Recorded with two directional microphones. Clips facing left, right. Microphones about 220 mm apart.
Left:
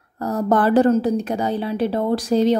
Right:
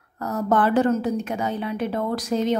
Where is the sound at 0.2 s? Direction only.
35° left (ahead or behind).